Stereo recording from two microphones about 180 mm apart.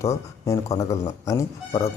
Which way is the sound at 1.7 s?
35° left (ahead or behind).